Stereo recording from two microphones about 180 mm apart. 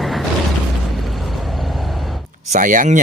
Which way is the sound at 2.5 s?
45° right (ahead or behind).